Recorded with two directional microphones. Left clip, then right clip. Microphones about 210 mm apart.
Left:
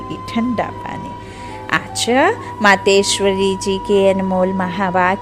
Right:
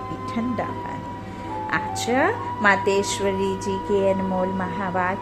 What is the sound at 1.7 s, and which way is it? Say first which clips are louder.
A woman's voice: left 7 dB; 45° left (ahead or behind).